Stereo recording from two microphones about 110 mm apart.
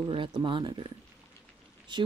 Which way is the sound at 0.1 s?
50° right (ahead or behind).